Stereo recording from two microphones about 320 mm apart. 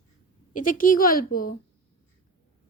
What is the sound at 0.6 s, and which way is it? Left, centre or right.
Speech, left.